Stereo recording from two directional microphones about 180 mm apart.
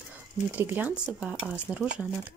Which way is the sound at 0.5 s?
10° right (ahead or behind).